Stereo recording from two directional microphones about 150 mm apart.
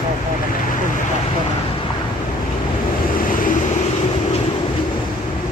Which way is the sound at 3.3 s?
65° left (ahead or behind).